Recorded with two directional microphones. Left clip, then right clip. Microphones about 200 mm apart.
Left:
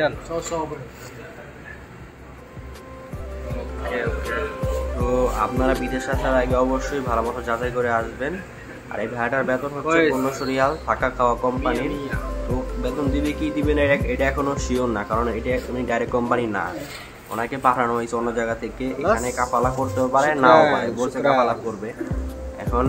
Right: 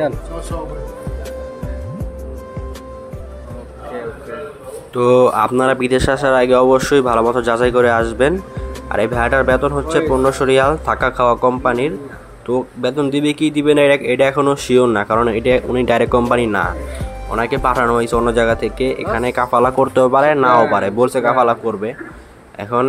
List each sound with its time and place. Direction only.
5.0 s speech: 55° right (ahead or behind)
12.8 s speech: 50° right (ahead or behind)